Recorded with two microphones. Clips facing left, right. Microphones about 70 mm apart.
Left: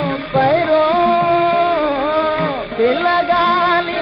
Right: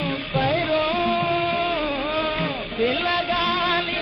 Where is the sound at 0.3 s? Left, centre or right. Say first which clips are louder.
Left 9 dB; left.